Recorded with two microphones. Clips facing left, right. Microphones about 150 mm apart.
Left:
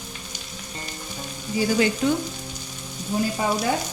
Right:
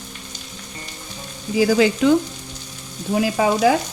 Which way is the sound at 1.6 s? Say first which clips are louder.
Right 6 dB; 90° right.